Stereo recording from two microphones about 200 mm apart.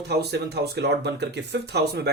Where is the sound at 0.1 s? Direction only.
55° right (ahead or behind).